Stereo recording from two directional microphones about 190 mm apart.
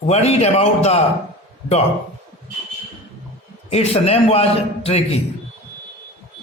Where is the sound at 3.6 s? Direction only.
35° left (ahead or behind).